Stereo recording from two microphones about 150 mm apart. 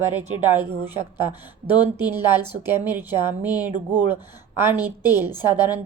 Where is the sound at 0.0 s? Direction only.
10° right (ahead or behind).